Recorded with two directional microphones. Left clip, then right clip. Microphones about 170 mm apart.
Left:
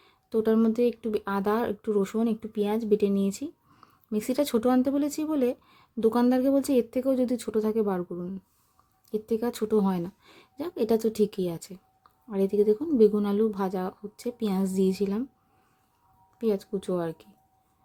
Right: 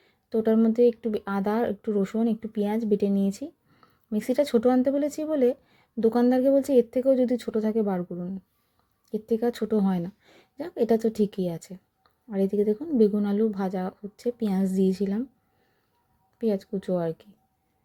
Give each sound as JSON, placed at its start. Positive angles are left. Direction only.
{"t": 0.0, "sound": "speech", "side_deg": 0}
{"t": 16.4, "sound": "speech", "side_deg": 0}